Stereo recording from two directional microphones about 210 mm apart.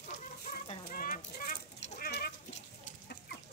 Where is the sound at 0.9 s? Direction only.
40° left (ahead or behind).